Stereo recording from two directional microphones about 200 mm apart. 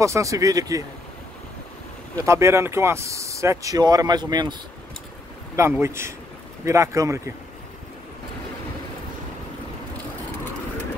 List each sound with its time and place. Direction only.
0.0 s speech: 15° right (ahead or behind)
2.1 s speech: 15° right (ahead or behind)
5.6 s speech: 15° right (ahead or behind)